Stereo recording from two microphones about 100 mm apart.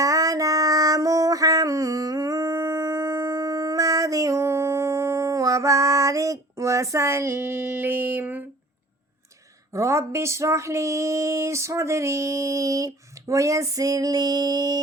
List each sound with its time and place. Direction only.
0.0 s music: 35° right (ahead or behind)
7.6 s a sound: 20° right (ahead or behind)
9.7 s speech: 30° right (ahead or behind)